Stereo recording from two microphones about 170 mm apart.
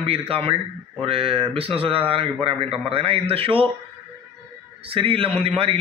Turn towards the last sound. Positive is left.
turn(degrees=-35)  # may be behind; listen again after turning